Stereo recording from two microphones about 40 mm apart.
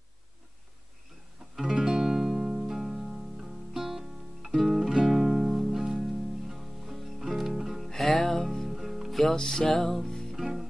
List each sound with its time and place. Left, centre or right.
1.6 s music: centre
8.0 s music: centre
8.6 s music: centre
9.1 s music: centre
10.3 s music: centre